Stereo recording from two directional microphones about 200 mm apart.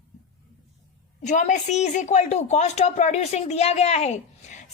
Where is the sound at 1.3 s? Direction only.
40° left (ahead or behind).